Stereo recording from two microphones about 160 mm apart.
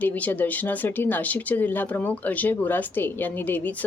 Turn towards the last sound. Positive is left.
turn(degrees=10)  # may be behind; listen again after turning